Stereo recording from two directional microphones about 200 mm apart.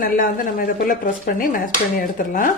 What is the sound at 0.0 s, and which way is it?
Speech, 45° left (ahead or behind).